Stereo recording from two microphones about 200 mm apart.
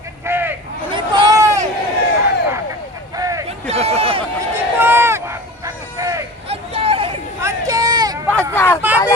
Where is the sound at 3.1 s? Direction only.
15° right (ahead or behind).